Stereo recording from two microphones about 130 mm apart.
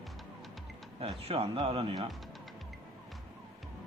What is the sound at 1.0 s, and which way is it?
Speech, 45° right (ahead or behind).